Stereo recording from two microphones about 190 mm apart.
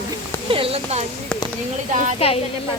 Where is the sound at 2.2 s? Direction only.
30° left (ahead or behind).